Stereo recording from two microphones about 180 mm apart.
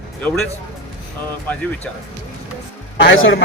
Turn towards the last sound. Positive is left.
turn(degrees=90)